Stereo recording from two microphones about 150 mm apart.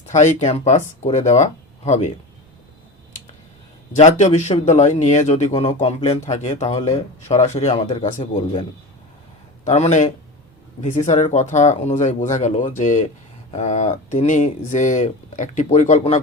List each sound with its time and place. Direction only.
0.1 s speech: 50° left (ahead or behind)
3.9 s speech: 50° left (ahead or behind)
9.6 s speech: 50° left (ahead or behind)